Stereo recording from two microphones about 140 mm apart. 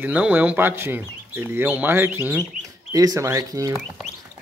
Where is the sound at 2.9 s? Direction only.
25° right (ahead or behind).